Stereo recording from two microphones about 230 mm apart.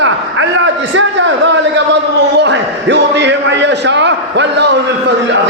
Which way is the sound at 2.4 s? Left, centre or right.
Right.